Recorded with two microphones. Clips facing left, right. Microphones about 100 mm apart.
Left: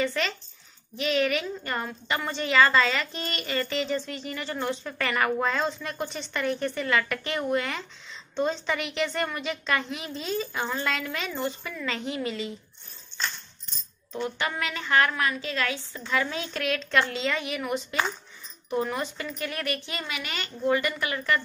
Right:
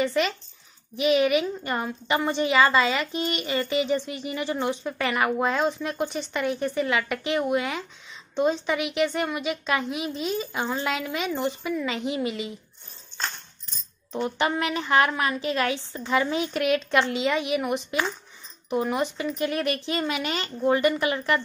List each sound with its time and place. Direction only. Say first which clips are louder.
0.0 s a woman's voice: right 4 dB; 15° right (ahead or behind)
14.1 s a woman's voice: right 5 dB; 25° right (ahead or behind)